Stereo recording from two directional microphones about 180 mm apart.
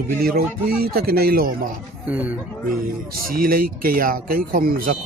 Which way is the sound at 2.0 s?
10° right (ahead or behind).